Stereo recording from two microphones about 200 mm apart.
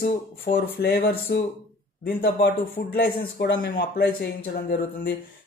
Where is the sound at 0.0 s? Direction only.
50° left (ahead or behind).